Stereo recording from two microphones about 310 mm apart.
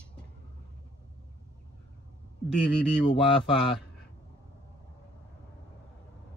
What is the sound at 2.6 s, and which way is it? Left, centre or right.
Speech, centre.